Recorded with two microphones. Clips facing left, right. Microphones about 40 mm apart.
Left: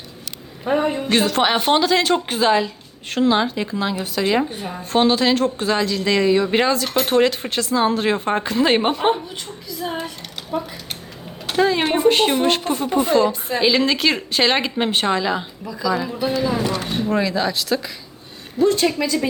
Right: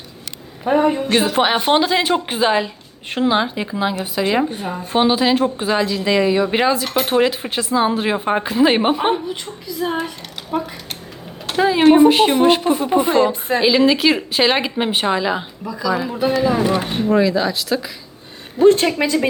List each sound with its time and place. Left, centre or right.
0.6 s a woman's voice: centre
13.6 s a woman's voice: centre
17.1 s speech: centre
18.6 s speech: right